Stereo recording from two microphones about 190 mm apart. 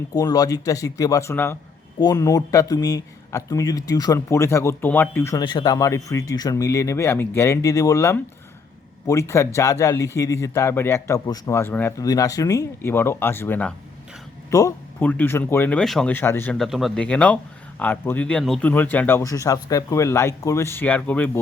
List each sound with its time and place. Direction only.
0.1 s speech: 20° left (ahead or behind)